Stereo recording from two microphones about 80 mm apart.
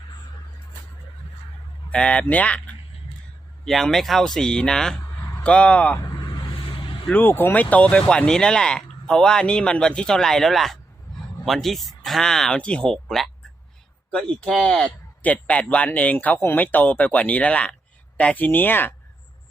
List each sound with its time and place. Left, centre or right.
1.9 s speech: centre
3.6 s speech: centre
6.3 s vehicle: left
7.1 s speech: left